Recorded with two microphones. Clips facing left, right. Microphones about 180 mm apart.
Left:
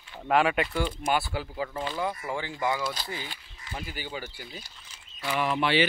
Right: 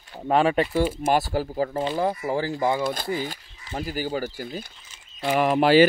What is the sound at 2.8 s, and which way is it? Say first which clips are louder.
Speech: right 7 dB; 50° right (ahead or behind).